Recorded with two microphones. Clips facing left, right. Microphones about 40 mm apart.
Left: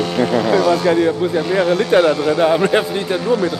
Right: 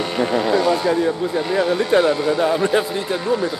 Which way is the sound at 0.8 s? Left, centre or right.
Left.